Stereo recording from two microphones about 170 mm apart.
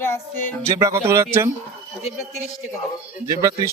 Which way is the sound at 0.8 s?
15° right (ahead or behind).